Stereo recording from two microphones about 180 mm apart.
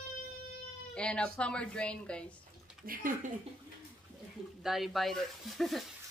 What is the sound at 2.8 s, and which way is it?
Speech, 50° right (ahead or behind).